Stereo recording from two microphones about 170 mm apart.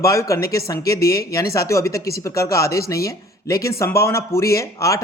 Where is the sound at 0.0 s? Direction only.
20° left (ahead or behind).